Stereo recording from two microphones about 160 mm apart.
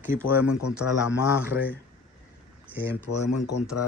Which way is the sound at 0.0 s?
15° right (ahead or behind).